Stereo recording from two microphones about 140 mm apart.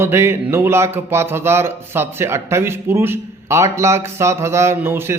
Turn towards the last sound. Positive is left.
turn(degrees=-20)  # may be behind; listen again after turning